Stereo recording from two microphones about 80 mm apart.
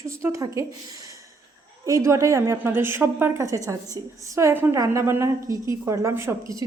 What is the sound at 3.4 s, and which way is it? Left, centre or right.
A woman's voice, right.